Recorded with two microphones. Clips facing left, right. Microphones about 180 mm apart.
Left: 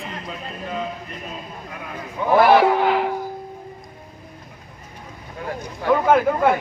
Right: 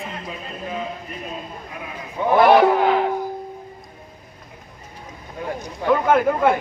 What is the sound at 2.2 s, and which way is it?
Speech, 20° right (ahead or behind).